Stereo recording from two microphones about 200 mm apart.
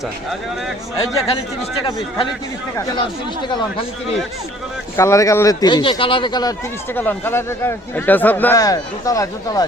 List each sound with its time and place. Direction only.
0.9 s a man's voice: 20° left (ahead or behind)
2.7 s a man's voice: 20° left (ahead or behind)
4.9 s a man's voice: 15° left (ahead or behind)
6.9 s a man's voice: 10° left (ahead or behind)